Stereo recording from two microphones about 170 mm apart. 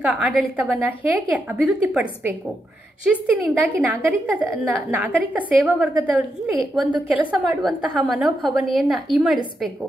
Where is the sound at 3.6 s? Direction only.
10° right (ahead or behind).